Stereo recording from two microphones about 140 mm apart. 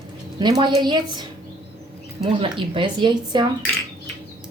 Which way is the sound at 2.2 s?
40° right (ahead or behind).